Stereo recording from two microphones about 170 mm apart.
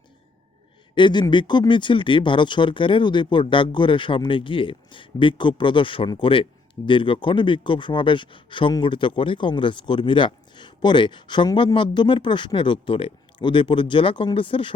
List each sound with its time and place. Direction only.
0.9 s speech: 25° left (ahead or behind)